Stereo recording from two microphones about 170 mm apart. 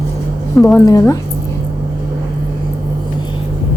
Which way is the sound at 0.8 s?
20° left (ahead or behind).